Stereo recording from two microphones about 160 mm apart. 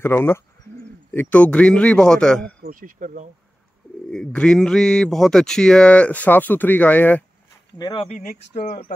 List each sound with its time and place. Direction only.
0.0 s a man's voice: 15° left (ahead or behind)
2.6 s speech: 60° right (ahead or behind)
4.1 s speech: 5° left (ahead or behind)
7.7 s speech: 30° left (ahead or behind)
8.2 s speech: 55° left (ahead or behind)